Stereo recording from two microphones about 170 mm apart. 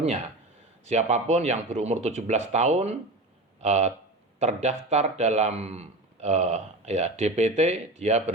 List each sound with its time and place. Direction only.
0.9 s speech: 40° right (ahead or behind)